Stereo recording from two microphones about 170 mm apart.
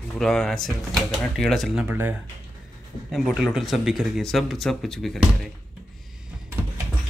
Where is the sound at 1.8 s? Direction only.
10° right (ahead or behind).